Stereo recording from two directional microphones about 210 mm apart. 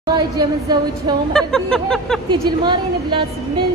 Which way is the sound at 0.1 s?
20° right (ahead or behind).